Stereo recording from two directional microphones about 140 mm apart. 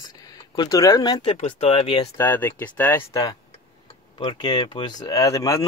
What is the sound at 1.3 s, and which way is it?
Speech, 45° left (ahead or behind).